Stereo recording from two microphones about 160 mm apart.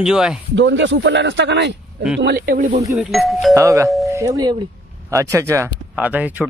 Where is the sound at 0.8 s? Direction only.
90° right.